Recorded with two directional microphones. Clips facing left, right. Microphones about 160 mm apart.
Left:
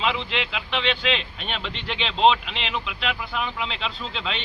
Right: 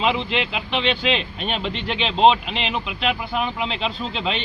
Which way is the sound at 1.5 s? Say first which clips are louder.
Right 6 dB; 45° right (ahead or behind).